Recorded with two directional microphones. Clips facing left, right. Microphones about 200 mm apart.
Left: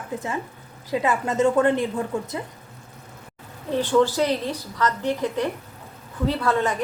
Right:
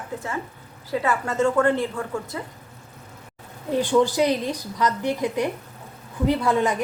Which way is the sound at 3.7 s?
15° right (ahead or behind).